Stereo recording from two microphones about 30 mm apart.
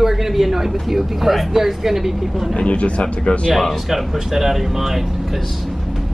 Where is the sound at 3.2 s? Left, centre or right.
Left.